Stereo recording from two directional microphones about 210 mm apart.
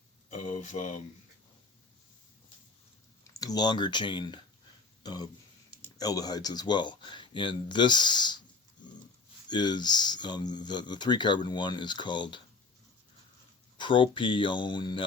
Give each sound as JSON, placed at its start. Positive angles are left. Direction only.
{"t": 0.3, "sound": "speech", "side_deg": 35}
{"t": 3.2, "sound": "speech", "side_deg": 15}
{"t": 9.5, "sound": "speech", "side_deg": 20}
{"t": 13.7, "sound": "speech", "side_deg": 25}